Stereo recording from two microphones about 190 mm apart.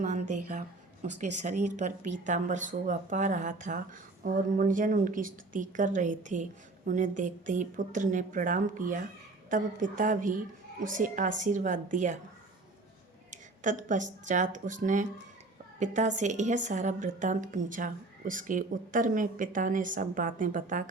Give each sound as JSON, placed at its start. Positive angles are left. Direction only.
{"t": 0.0, "sound": "a sound", "side_deg": -40}
{"t": 1.0, "sound": "a woman's voice", "side_deg": -40}
{"t": 13.3, "sound": "a woman's voice", "side_deg": -40}